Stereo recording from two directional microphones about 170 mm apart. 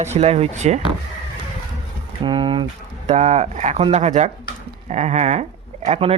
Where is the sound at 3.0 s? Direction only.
40° right (ahead or behind).